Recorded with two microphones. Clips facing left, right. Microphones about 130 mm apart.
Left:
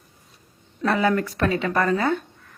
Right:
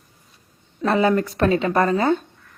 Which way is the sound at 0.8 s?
25° right (ahead or behind).